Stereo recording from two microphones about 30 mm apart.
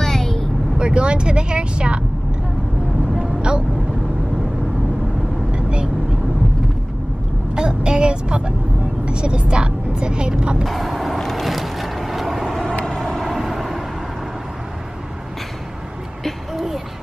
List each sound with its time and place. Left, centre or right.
0.0 s vehicle: centre
0.7 s speech: right
5.5 s vehicle: right
7.5 s vehicle: right
10.6 s a sound: centre
11.1 s vehicle: centre
11.4 s vehicle: centre
12.8 s vehicle: centre
13.2 s vehicle: centre
16.5 s a sound: centre